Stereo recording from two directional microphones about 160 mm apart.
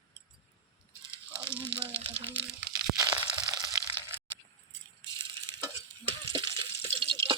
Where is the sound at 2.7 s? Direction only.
25° right (ahead or behind).